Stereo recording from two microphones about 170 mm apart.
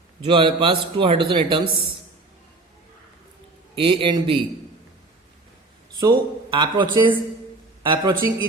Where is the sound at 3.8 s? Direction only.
30° right (ahead or behind).